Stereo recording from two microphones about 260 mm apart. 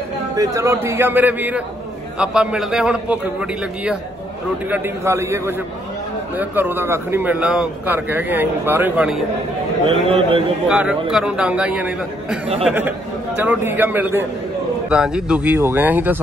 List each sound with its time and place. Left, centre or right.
0.4 s a man's voice: centre
10.0 s a man's voice: right
10.7 s a man's voice: centre